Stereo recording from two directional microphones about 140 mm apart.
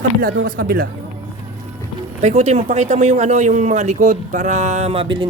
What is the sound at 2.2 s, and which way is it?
Speech, 50° right (ahead or behind).